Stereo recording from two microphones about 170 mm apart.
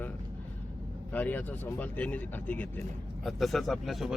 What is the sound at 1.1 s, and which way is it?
A man's voice, 10° left (ahead or behind).